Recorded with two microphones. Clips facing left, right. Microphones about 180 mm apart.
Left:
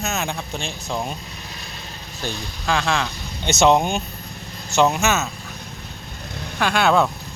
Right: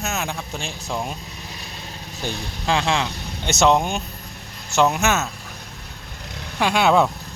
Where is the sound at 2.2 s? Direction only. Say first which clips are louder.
Right 1 dB; 20° right (ahead or behind).